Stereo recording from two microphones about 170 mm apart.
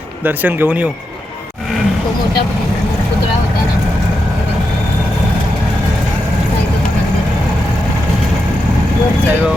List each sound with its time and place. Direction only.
0.3 s speech: 10° right (ahead or behind)